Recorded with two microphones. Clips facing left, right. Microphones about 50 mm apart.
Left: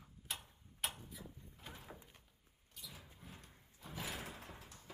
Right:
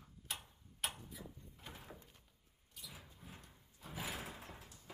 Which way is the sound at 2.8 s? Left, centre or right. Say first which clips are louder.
Even; centre.